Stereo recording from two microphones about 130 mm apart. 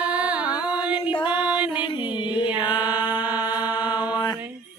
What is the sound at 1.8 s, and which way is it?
Music, 35° left (ahead or behind).